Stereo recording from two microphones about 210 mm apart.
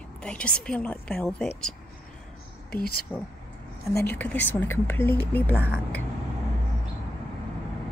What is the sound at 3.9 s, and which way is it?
A woman's voice, 10° left (ahead or behind).